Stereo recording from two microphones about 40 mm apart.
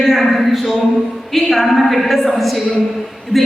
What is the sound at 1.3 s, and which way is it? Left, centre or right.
A man's voice, centre.